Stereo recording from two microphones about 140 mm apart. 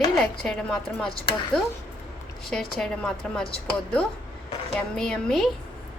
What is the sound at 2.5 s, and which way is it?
A woman's voice, 5° left (ahead or behind).